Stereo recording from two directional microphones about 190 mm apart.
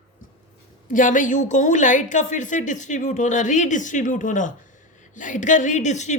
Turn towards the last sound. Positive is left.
turn(degrees=40)  # may be behind; listen again after turning